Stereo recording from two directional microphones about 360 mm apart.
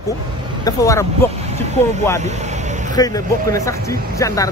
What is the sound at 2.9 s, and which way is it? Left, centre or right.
Speech, centre.